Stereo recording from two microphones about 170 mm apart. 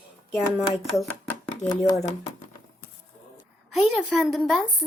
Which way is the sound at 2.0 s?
40° left (ahead or behind).